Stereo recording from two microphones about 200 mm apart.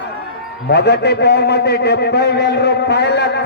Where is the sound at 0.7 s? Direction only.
55° left (ahead or behind).